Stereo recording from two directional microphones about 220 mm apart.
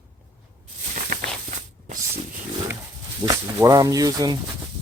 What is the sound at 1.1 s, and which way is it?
Walk, 40° right (ahead or behind).